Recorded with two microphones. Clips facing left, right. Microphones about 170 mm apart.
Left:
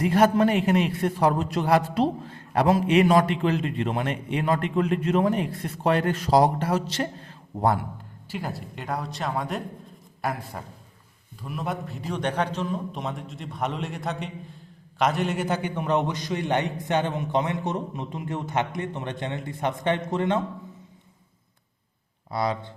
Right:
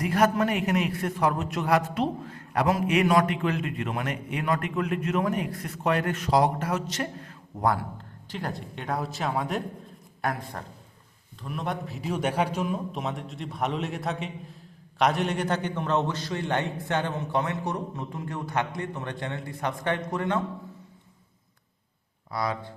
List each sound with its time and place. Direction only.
0.0 s a man's voice: 30° left (ahead or behind)
8.3 s a man's voice: 5° left (ahead or behind); by 20.4 s 25° left (ahead or behind)
22.3 s a man's voice: 25° left (ahead or behind)